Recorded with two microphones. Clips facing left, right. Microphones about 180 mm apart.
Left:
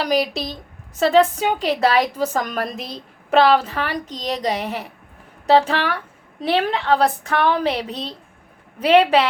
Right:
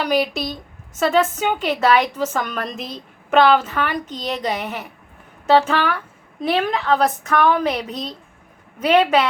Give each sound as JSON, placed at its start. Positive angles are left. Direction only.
{"t": 0.0, "sound": "a woman's voice", "side_deg": 35}